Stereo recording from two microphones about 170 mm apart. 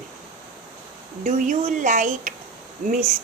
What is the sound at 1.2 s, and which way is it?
A woman's voice, 50° right (ahead or behind).